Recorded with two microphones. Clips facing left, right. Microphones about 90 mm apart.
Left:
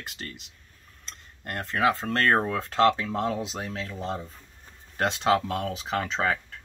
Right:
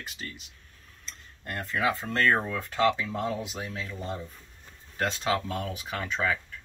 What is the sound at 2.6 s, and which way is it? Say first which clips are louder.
Speech: left 4 dB; 75° left (ahead or behind).